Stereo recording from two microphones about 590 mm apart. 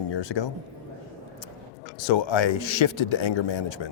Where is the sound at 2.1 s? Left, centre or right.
Left.